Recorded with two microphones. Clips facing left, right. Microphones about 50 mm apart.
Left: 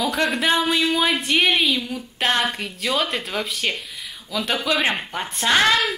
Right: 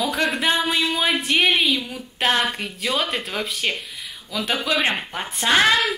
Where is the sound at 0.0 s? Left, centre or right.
Centre.